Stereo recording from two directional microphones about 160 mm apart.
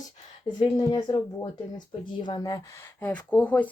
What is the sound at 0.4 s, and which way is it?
Speech, 25° left (ahead or behind).